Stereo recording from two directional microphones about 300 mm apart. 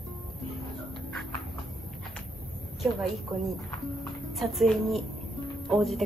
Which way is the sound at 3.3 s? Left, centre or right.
Centre.